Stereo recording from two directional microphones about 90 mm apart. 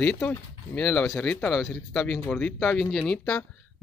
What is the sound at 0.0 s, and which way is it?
Speech, 15° left (ahead or behind).